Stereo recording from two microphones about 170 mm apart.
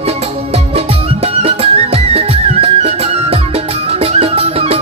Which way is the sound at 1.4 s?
35° right (ahead or behind).